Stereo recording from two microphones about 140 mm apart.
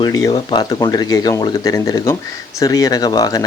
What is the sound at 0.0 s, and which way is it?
Speech, 25° left (ahead or behind).